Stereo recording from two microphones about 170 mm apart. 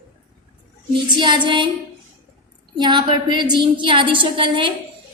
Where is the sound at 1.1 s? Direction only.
25° right (ahead or behind).